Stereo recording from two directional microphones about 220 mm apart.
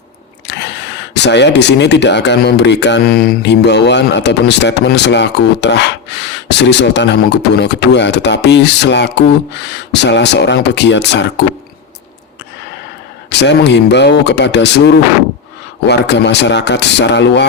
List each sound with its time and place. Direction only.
0.4 s a sound: 50° left (ahead or behind)
1.1 s speech: 50° left (ahead or behind)
13.3 s speech: 50° left (ahead or behind)